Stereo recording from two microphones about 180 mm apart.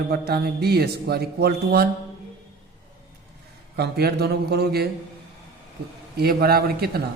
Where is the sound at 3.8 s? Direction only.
65° right (ahead or behind).